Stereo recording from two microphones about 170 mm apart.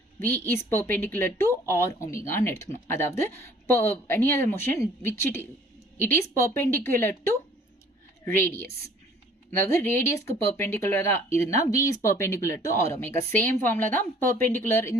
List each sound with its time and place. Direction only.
0.2 s speech: 10° left (ahead or behind)